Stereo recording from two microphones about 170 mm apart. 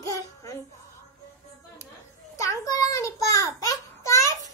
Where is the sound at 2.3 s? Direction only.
20° left (ahead or behind).